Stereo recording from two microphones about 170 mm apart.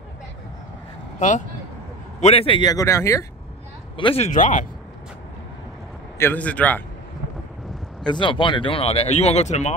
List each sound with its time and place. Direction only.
2.1 s speech: 35° left (ahead or behind); by 3.3 s 15° left (ahead or behind)
3.9 s speech: 30° left (ahead or behind)
4.3 s speech: 50° left (ahead or behind)
6.1 s a man's voice: 10° left (ahead or behind)
8.1 s speech: 30° left (ahead or behind)